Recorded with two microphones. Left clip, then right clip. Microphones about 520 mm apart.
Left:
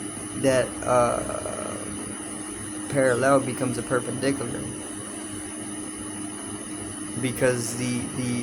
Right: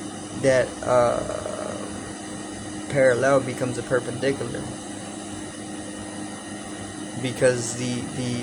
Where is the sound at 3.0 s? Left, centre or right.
Left.